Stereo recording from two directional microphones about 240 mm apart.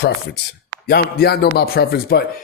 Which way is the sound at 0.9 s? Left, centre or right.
Left.